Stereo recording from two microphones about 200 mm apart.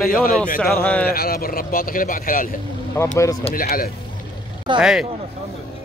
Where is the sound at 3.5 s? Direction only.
50° left (ahead or behind).